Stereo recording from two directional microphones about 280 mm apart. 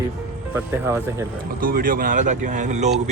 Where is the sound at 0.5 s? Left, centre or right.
Centre.